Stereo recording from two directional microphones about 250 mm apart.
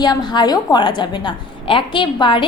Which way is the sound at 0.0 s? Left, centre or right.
Centre.